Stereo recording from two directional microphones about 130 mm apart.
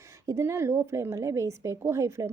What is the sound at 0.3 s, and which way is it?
Speech, 20° right (ahead or behind).